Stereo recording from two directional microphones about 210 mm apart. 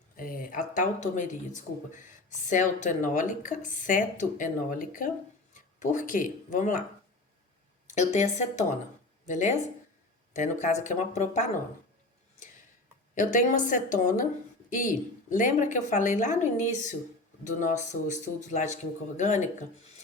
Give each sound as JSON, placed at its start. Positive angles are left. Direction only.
{"t": 0.2, "sound": "speech", "side_deg": 40}
{"t": 7.9, "sound": "speech", "side_deg": 35}
{"t": 13.1, "sound": "speech", "side_deg": 40}
{"t": 17.4, "sound": "speech", "side_deg": 35}